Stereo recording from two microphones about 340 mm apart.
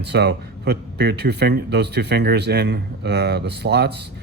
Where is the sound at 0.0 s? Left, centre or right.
Right.